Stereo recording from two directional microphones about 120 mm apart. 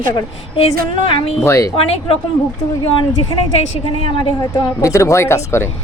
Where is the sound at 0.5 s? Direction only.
50° left (ahead or behind).